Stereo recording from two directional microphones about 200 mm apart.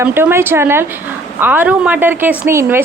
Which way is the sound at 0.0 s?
10° right (ahead or behind).